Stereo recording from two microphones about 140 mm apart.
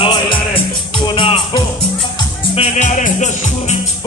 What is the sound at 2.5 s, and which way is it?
Music, 50° left (ahead or behind).